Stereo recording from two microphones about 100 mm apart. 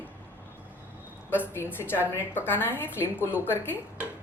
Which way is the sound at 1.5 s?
20° left (ahead or behind).